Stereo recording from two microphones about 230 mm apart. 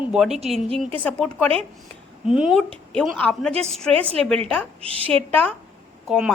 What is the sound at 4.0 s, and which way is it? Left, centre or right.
Speech, right.